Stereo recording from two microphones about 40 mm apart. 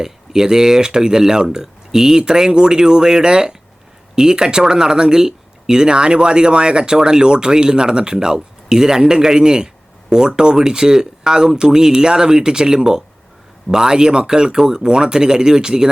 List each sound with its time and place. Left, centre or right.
0.0 s speech: centre